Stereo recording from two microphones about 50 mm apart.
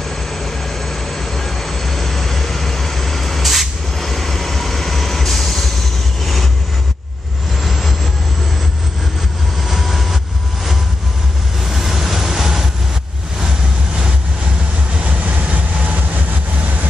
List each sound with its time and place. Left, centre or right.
0.3 s vehicle: centre
7.6 s vehicle: centre
9.7 s vehicle: centre
11.7 s vehicle: centre
15.0 s vehicle: right